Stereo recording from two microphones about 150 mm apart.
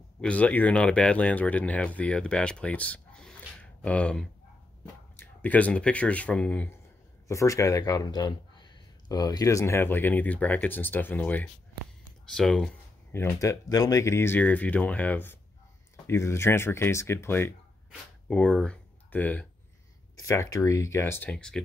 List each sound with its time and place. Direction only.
0.2 s speech: 10° left (ahead or behind)
7.2 s speech: 20° left (ahead or behind); by 12.7 s 5° left (ahead or behind)
13.1 s speech: 15° left (ahead or behind)
20.2 s speech: 20° left (ahead or behind); by 21.6 s 5° left (ahead or behind)